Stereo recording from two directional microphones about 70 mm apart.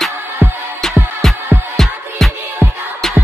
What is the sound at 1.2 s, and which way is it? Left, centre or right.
Music, centre.